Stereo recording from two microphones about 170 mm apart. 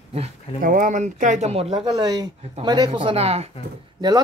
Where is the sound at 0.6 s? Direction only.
50° right (ahead or behind); by 1.9 s 35° right (ahead or behind).